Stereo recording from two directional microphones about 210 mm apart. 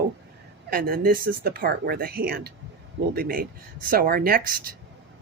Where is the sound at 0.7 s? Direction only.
45° right (ahead or behind).